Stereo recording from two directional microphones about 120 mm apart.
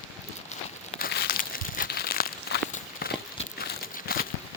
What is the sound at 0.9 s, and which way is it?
Crumpling, 60° left (ahead or behind).